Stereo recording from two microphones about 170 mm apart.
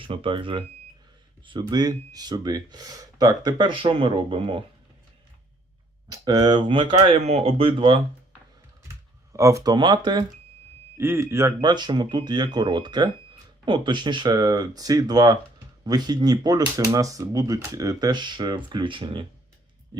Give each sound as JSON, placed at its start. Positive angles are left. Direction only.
{"t": 0.0, "sound": "speech", "side_deg": -30}
{"t": 6.1, "sound": "speech", "side_deg": -25}
{"t": 9.3, "sound": "speech", "side_deg": -20}
{"t": 10.9, "sound": "speech", "side_deg": -15}